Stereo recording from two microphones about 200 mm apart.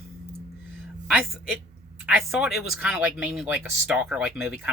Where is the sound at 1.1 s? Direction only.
5° right (ahead or behind).